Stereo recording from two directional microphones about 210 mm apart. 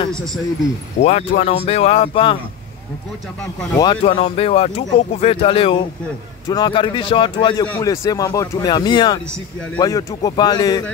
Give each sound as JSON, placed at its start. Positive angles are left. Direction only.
{"t": 1.0, "sound": "speech", "side_deg": 30}
{"t": 3.8, "sound": "speech", "side_deg": 25}